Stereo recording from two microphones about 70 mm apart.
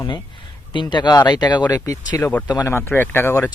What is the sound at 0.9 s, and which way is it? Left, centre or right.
Speech, left.